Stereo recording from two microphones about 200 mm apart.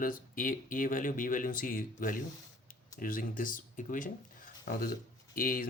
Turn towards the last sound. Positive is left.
turn(degrees=45)  # may be behind; listen again after turning